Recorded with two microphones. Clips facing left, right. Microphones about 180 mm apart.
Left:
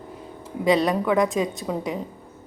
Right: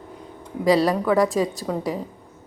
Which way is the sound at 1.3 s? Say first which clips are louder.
Right 2 dB; 20° left (ahead or behind).